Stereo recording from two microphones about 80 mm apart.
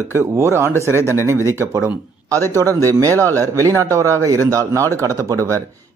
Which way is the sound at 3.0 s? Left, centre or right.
Right.